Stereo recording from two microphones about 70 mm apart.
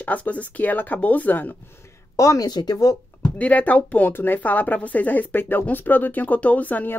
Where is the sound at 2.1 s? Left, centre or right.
Left.